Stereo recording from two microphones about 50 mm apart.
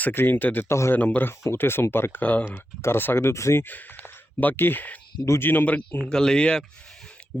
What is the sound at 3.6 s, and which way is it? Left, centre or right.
Speech, left.